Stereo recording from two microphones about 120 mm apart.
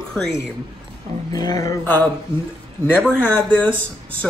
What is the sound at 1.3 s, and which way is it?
Speech, 30° left (ahead or behind).